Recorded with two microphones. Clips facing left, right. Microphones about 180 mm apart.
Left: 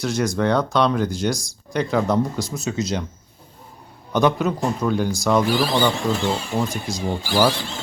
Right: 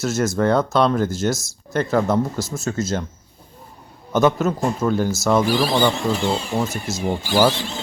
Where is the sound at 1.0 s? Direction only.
45° right (ahead or behind).